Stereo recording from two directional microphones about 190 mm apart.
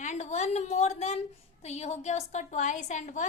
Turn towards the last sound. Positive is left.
turn(degrees=40)  # may be behind; listen again after turning